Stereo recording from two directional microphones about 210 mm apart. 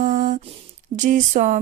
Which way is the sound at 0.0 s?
35° right (ahead or behind).